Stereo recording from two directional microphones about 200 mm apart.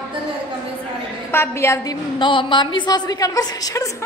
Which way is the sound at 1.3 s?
15° left (ahead or behind).